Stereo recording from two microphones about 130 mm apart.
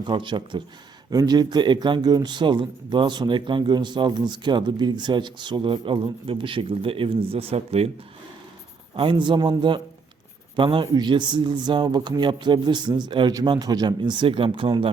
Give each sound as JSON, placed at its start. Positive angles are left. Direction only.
{"t": 0.0, "sound": "speech", "side_deg": -40}
{"t": 9.0, "sound": "speech", "side_deg": -40}